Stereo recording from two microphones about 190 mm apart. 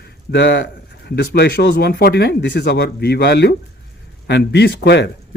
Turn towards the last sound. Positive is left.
turn(degrees=60)  # may be behind; listen again after turning